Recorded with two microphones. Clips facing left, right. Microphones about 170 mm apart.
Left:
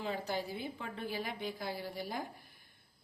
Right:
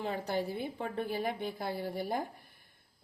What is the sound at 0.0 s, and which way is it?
A woman's voice, 55° right (ahead or behind).